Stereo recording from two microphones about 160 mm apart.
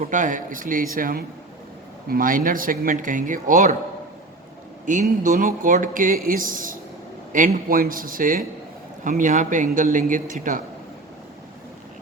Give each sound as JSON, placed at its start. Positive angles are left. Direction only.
{"t": 0.0, "sound": "speech", "side_deg": -55}
{"t": 4.9, "sound": "speech", "side_deg": -55}